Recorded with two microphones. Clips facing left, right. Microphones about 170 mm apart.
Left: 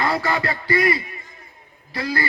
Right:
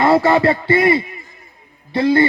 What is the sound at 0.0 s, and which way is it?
A man's voice, 25° right (ahead or behind).